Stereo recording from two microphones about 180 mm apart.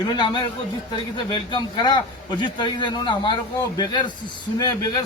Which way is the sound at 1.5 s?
25° left (ahead or behind).